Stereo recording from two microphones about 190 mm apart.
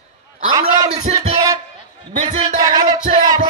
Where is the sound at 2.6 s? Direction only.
20° right (ahead or behind).